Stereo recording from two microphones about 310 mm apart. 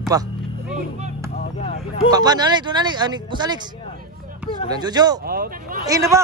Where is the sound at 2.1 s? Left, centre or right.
Centre.